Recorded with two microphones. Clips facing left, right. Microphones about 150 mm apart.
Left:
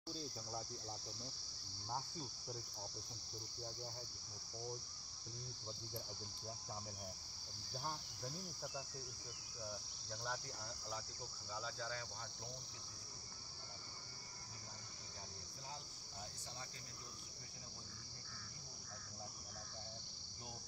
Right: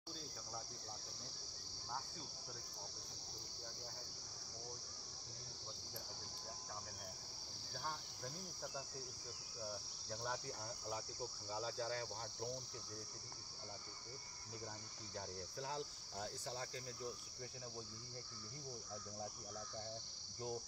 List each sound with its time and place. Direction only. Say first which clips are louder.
9.7 s insect: right 2 dB; 5° right (ahead or behind)
11.5 s cricket: right 3 dB; 40° right (ahead or behind)
15.6 s cricket: right 8 dB; 70° right (ahead or behind)